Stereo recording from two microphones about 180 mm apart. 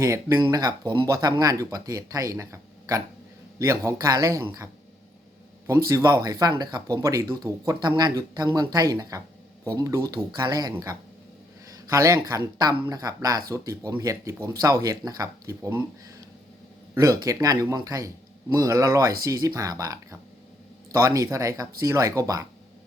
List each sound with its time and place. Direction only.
0.0 s a man's voice: 15° right (ahead or behind)
5.9 s a man's voice: 20° right (ahead or behind)
16.9 s a man's voice: 20° right (ahead or behind)